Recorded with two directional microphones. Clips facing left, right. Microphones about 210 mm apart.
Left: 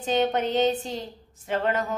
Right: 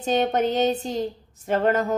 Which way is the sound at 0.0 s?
45° right (ahead or behind).